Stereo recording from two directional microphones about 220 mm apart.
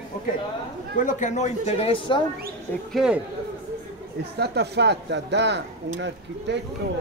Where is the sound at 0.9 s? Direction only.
35° left (ahead or behind).